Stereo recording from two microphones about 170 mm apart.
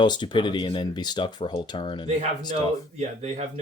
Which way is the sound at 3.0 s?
40° right (ahead or behind).